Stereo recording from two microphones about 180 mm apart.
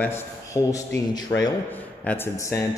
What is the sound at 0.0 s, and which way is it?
A man's voice, 15° left (ahead or behind).